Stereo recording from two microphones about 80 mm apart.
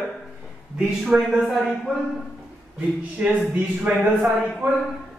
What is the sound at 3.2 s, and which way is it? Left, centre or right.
Speech, centre.